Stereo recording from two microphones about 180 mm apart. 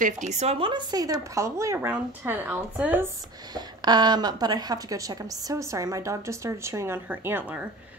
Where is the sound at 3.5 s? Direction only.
25° right (ahead or behind).